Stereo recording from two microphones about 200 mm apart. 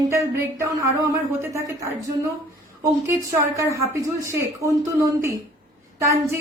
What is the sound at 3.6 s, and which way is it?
Speech, 15° right (ahead or behind).